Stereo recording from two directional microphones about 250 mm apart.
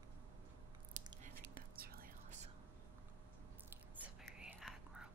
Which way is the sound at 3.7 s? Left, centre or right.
Centre.